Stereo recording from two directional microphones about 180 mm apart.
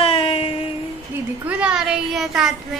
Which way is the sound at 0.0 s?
30° left (ahead or behind).